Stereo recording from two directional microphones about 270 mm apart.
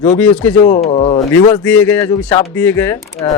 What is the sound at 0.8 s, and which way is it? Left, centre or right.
Speech, left.